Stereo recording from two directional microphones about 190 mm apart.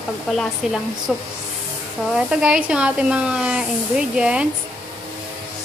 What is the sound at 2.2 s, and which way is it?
Speech, 5° right (ahead or behind).